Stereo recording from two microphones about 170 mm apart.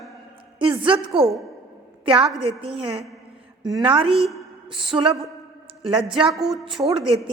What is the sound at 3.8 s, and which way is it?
A woman's voice, 30° right (ahead or behind).